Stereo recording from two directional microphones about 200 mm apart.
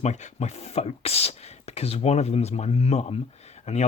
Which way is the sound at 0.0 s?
35° left (ahead or behind).